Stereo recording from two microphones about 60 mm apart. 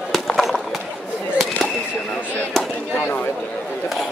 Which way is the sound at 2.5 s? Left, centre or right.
Centre.